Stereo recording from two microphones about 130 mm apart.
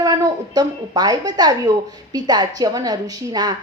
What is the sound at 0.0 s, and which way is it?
A woman's voice, 30° right (ahead or behind).